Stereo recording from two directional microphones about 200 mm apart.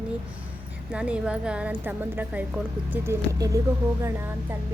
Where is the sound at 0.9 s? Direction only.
5° right (ahead or behind).